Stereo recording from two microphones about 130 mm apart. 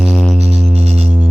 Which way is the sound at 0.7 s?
55° right (ahead or behind).